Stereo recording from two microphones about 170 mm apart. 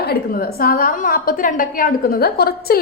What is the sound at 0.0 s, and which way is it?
A woman's voice, 60° left (ahead or behind).